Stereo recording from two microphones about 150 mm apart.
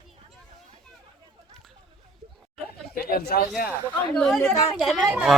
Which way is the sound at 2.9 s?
90° left.